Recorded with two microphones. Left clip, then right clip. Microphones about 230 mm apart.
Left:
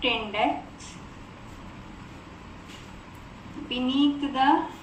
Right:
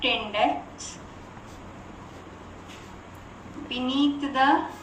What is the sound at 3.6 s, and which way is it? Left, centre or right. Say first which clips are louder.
Speech: left 1 dB; centre.